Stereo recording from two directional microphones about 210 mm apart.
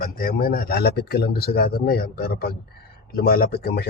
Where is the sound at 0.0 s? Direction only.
45° left (ahead or behind).